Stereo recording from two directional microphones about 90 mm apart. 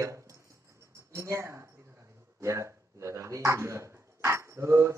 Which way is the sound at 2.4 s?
35° right (ahead or behind).